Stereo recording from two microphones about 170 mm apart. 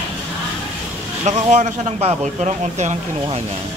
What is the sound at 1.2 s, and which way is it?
A man's voice, 45° right (ahead or behind).